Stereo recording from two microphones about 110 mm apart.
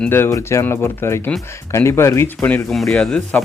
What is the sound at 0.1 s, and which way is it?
Speech, 25° left (ahead or behind).